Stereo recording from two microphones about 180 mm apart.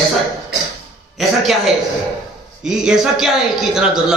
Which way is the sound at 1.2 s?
Centre (ahead or behind).